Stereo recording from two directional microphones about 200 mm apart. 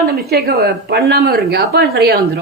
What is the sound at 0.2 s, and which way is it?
A woman's voice, 50° right (ahead or behind).